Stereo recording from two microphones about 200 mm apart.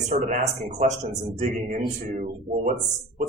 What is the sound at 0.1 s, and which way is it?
A man's voice, 40° right (ahead or behind).